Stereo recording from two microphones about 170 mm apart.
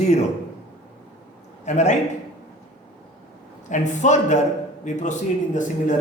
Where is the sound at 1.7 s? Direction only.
45° left (ahead or behind).